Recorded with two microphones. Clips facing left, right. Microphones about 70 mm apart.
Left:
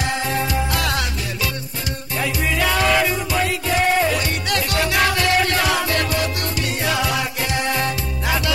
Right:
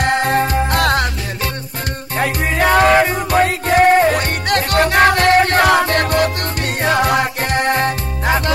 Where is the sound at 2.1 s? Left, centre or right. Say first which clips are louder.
Right 4 dB; right.